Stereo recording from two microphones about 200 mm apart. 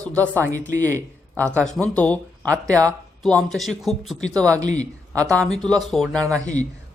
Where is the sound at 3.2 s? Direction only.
5° left (ahead or behind).